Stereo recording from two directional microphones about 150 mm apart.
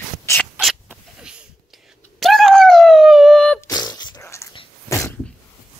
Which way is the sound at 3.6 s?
25° left (ahead or behind).